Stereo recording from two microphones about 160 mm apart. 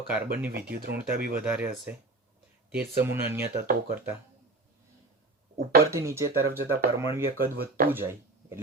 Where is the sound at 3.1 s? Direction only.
15° right (ahead or behind).